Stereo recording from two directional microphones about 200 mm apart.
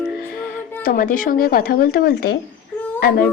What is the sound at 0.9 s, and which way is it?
A woman's voice, 45° left (ahead or behind).